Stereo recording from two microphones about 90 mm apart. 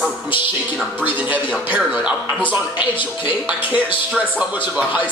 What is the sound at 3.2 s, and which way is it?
Speech, 15° right (ahead or behind).